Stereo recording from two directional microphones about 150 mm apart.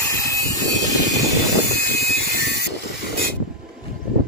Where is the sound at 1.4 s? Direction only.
90° left.